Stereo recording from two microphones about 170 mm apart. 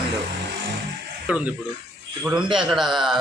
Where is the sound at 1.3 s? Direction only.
5° right (ahead or behind).